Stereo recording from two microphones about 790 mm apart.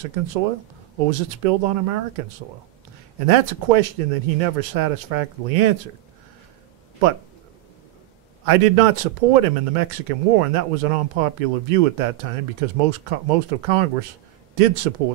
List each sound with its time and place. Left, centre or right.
0.0 s a man's voice: right
3.3 s a man's voice: right
8.5 s a man's voice: right